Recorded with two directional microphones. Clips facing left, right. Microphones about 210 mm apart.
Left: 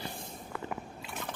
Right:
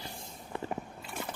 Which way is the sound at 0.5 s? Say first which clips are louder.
Right 3 dB; 25° right (ahead or behind).